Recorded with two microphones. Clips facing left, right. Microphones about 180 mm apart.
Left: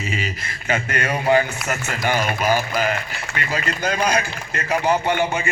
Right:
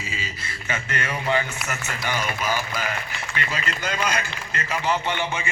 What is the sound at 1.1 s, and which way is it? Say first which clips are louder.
Speech: left 7 dB; 40° left (ahead or behind).